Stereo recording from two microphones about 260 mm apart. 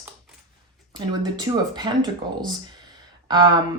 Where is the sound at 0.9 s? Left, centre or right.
Centre.